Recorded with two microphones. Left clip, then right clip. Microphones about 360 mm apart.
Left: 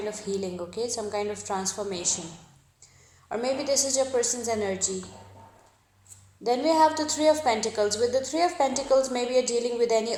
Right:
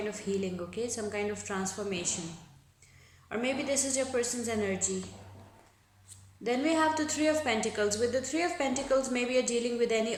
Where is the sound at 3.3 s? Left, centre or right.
Centre.